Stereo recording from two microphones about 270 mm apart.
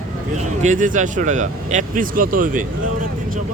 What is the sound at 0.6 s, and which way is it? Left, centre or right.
Speech, right.